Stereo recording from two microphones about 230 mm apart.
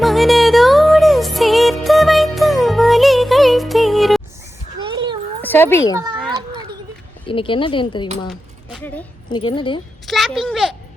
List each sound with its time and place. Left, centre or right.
0.0 s music: centre
4.9 s a sound: centre
5.4 s cat: centre
7.3 s speech: left
8.3 s a woman's voice: centre
9.3 s speech: left
10.1 s a child's voice: centre